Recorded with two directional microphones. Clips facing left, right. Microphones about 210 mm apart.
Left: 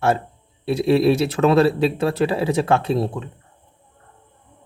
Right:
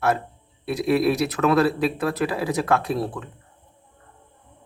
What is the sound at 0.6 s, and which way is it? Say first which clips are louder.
Speech: left 4 dB; 25° left (ahead or behind).